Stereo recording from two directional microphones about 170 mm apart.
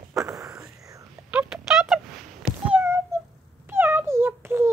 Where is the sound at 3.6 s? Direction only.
10° right (ahead or behind).